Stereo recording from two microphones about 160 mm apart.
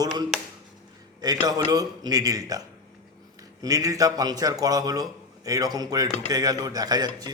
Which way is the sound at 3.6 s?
20° right (ahead or behind).